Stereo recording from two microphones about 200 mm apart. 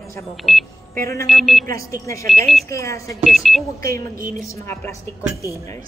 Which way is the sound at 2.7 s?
15° left (ahead or behind).